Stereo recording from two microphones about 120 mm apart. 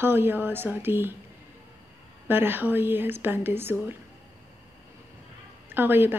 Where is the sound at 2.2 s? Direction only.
15° right (ahead or behind).